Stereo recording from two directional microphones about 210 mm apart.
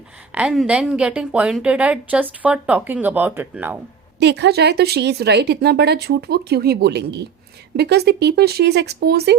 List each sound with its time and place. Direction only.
0.3 s a woman's voice: 5° right (ahead or behind)
4.2 s speech: 55° right (ahead or behind)